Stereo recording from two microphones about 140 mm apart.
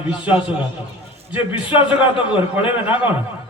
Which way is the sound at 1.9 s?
40° left (ahead or behind).